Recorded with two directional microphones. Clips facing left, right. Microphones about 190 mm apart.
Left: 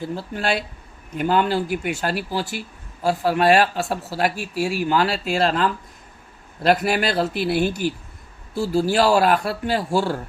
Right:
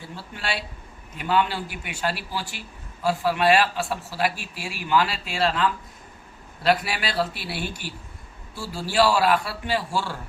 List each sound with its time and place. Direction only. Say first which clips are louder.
0.3 s speech: left 6 dB; 45° left (ahead or behind)
8.7 s speech: left 4 dB; 45° left (ahead or behind)